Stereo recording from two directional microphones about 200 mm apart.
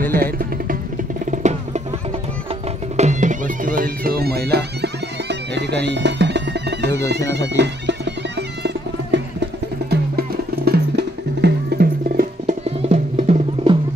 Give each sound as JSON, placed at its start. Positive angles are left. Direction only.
{"t": 0.1, "sound": "music", "side_deg": -45}
{"t": 3.0, "sound": "music", "side_deg": -35}
{"t": 12.6, "sound": "music", "side_deg": -30}